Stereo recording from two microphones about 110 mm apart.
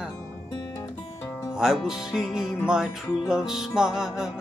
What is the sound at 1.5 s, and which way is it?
Speech, 5° right (ahead or behind).